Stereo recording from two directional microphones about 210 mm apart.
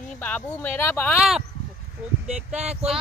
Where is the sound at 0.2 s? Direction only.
10° left (ahead or behind).